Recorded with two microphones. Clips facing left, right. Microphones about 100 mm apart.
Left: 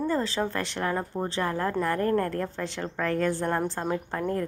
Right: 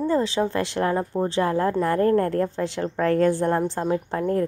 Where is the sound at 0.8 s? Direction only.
25° right (ahead or behind).